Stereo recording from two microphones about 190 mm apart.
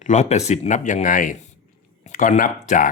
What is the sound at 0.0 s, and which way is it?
Speech, 35° left (ahead or behind).